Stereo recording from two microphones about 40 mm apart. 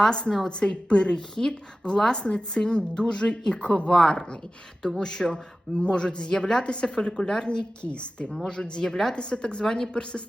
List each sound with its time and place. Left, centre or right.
0.1 s speech: centre
3.9 s speech: centre; by 10.2 s left